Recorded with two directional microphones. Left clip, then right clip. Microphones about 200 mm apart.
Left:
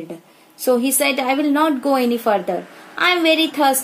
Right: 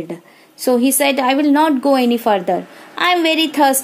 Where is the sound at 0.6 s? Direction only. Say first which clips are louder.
Right 2 dB; 50° right (ahead or behind).